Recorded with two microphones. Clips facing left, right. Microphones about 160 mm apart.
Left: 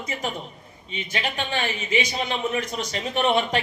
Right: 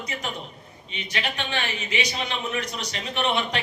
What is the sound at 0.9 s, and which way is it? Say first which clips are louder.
Speech: left 2 dB; 45° left (ahead or behind).